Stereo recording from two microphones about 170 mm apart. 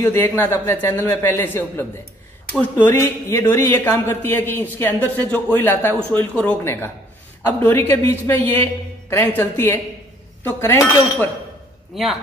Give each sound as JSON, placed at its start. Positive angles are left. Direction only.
{"t": 0.0, "sound": "speech", "side_deg": 15}
{"t": 11.9, "sound": "speech", "side_deg": 0}